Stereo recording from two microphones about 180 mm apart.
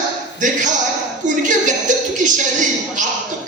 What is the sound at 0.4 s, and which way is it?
Speech, 45° right (ahead or behind).